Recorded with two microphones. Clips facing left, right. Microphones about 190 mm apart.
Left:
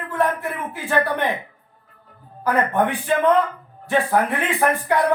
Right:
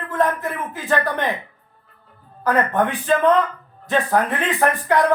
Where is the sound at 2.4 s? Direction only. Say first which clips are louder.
Right 1 dB; 15° left (ahead or behind).